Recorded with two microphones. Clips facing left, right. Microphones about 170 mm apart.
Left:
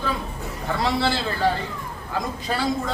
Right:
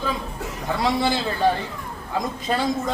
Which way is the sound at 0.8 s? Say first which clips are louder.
Right 1 dB; 15° right (ahead or behind).